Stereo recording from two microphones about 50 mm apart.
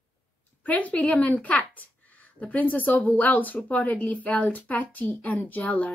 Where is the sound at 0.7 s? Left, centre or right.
Left.